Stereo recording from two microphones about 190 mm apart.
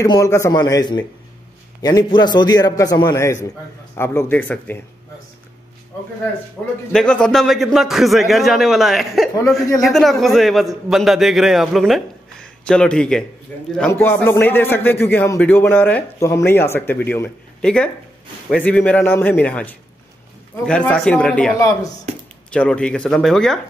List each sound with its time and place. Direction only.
0.0 s a man's voice: 15° left (ahead or behind)
6.9 s a man's voice: 5° left (ahead or behind)